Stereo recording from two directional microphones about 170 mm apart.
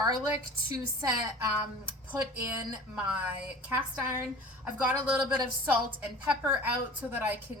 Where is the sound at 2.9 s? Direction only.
10° right (ahead or behind).